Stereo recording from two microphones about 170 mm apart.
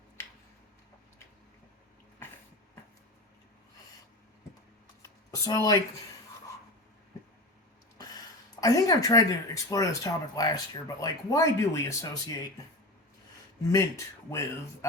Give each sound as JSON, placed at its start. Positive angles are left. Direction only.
{"t": 5.3, "sound": "speech", "side_deg": 20}
{"t": 8.6, "sound": "speech", "side_deg": 20}
{"t": 13.7, "sound": "speech", "side_deg": 20}